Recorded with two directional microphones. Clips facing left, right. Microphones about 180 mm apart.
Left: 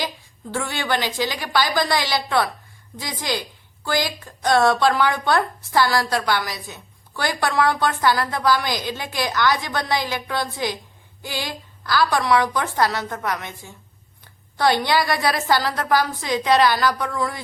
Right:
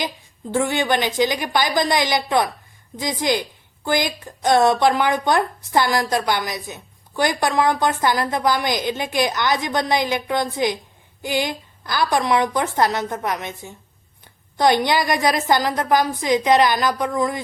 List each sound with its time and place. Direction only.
0.0 s speech: 20° right (ahead or behind)